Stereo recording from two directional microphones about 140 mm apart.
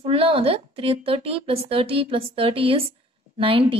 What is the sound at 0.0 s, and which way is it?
Speech, 40° right (ahead or behind).